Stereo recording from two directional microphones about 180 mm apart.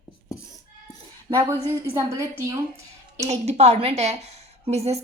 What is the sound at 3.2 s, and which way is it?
A woman's voice, 35° right (ahead or behind).